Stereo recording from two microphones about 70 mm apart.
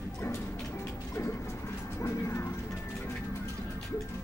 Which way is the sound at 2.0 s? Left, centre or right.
Left.